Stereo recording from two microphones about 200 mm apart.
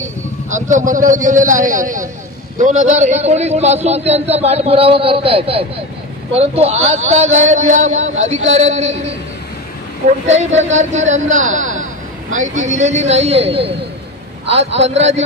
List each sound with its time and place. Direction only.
0.0 s a man's voice: 40° right (ahead or behind)
8.3 s a man's voice: 75° right (ahead or behind)
8.5 s a man's voice: 35° right (ahead or behind)